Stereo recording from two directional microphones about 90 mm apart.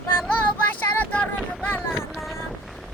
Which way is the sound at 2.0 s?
5° right (ahead or behind).